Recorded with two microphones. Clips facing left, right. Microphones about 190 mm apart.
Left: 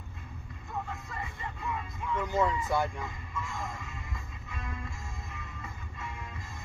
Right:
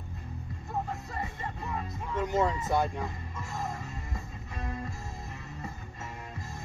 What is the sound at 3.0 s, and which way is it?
Music, 40° right (ahead or behind).